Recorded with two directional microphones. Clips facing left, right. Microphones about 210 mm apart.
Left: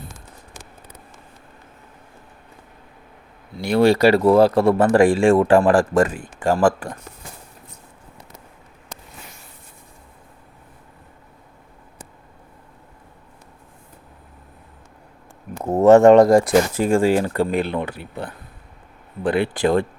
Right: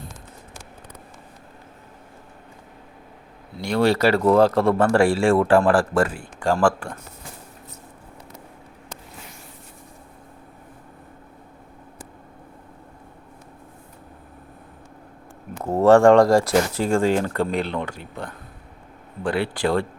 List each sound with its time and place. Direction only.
3.6 s speech: 10° left (ahead or behind)
15.6 s speech: 20° left (ahead or behind)